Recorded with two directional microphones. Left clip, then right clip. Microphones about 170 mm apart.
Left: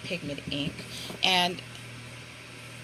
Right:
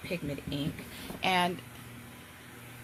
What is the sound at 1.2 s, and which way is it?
Speech, 20° right (ahead or behind).